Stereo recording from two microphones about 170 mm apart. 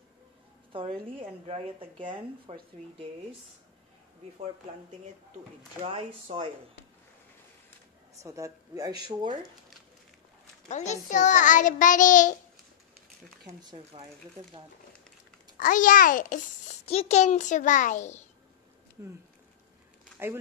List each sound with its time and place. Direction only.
0.7 s a woman's voice: 35° right (ahead or behind)
5.8 s a woman's voice: 40° right (ahead or behind)
8.2 s speech: 20° right (ahead or behind)
10.7 s a child's voice: 45° left (ahead or behind)
13.4 s speech: 25° right (ahead or behind)
15.5 s a child's voice: 50° left (ahead or behind)